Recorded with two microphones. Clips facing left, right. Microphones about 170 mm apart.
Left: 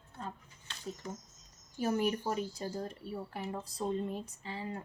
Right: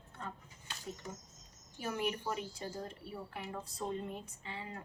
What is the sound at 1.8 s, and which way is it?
Speech, 40° left (ahead or behind).